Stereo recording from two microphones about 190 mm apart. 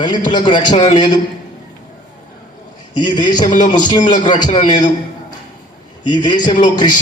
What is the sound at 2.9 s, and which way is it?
A man's voice, 20° left (ahead or behind).